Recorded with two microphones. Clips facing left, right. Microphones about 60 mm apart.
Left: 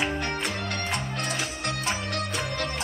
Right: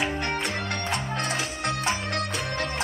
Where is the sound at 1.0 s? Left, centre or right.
Right.